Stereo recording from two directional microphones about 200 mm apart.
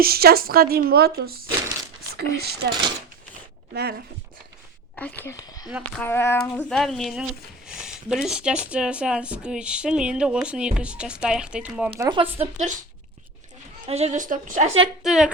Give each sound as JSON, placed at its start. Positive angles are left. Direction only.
{"t": 0.0, "sound": "speech", "side_deg": -50}
{"t": 4.9, "sound": "speech", "side_deg": 10}
{"t": 5.6, "sound": "speech", "side_deg": -5}
{"t": 6.0, "sound": "speech", "side_deg": 10}
{"t": 11.9, "sound": "speech", "side_deg": -15}
{"t": 12.2, "sound": "a woman's voice", "side_deg": -35}
{"t": 13.8, "sound": "a woman's voice", "side_deg": -35}
{"t": 15.0, "sound": "speech", "side_deg": -5}